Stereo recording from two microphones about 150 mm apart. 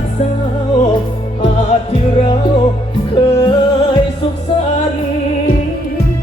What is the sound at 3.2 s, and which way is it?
Music, 35° left (ahead or behind).